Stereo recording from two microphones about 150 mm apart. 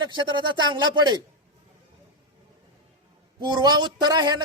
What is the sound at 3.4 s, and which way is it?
Speech, 30° right (ahead or behind).